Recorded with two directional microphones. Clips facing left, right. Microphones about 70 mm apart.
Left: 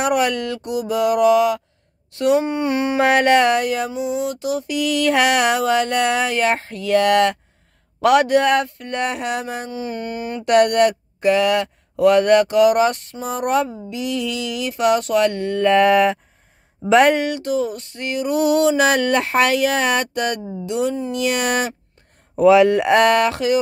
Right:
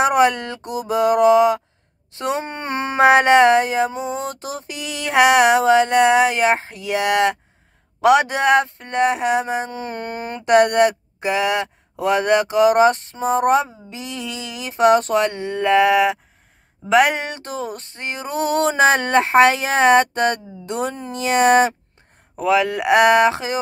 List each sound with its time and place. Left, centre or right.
0.0 s speech: right
2.4 s a sound: right
3.0 s speech: right
3.9 s speech: right
9.7 s a sound: right
10.4 s speech: right
15.7 s speech: centre
17.1 s speech: right
20.6 s a sound: right
21.1 s speech: right
22.4 s speech: centre; by 23.6 s right